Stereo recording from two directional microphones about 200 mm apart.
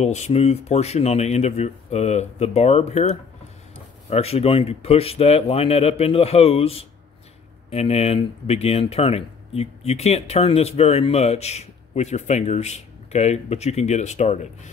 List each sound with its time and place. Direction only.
0.0 s speech: 35° left (ahead or behind)